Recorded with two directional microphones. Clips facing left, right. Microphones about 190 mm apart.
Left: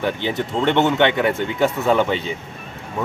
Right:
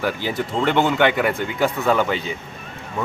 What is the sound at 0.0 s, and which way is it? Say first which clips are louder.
Speech: left 1 dB; 25° left (ahead or behind).